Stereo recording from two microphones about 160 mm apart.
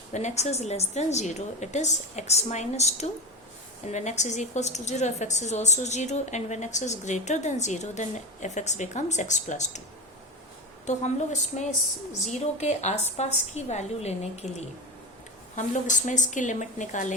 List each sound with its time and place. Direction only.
0.1 s a woman's voice: 45° left (ahead or behind)
10.8 s a woman's voice: 45° left (ahead or behind)
15.5 s a woman's voice: 50° left (ahead or behind)